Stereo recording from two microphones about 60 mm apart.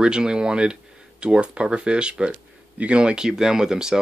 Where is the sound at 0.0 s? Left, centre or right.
Centre.